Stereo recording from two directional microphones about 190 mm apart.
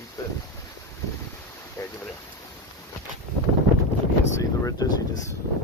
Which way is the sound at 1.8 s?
10° left (ahead or behind).